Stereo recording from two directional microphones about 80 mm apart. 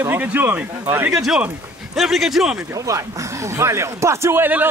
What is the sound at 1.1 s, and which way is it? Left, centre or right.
Speech, centre.